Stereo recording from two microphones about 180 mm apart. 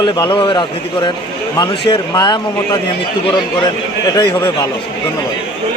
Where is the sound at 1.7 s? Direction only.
25° left (ahead or behind).